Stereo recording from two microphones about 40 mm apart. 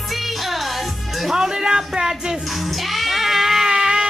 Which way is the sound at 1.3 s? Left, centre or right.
Centre.